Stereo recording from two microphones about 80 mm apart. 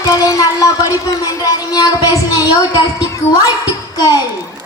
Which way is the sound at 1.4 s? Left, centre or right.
Left.